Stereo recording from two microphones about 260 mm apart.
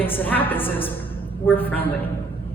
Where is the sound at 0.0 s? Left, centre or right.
Centre.